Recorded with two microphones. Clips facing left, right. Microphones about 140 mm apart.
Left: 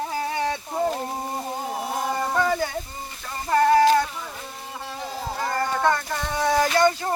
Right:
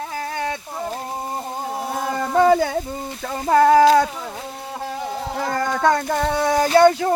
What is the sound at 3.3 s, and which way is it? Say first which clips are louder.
Child singing: right 5 dB; 90° right.